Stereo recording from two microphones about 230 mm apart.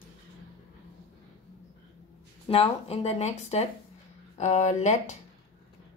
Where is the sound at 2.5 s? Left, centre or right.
Left.